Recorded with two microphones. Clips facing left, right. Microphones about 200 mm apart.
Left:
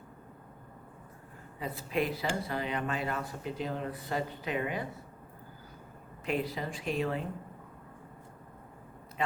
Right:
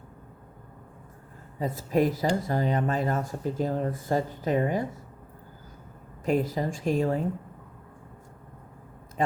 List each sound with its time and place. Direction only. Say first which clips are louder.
1.5 s speech: right 7 dB; 45° right (ahead or behind)
6.2 s speech: right 7 dB; 45° right (ahead or behind)